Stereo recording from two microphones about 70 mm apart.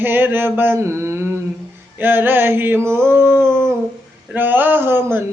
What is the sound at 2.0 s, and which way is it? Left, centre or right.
Mantra, right.